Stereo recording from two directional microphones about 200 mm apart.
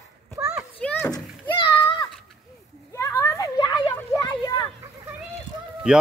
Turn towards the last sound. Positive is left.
turn(degrees=-5)  # may be behind; listen again after turning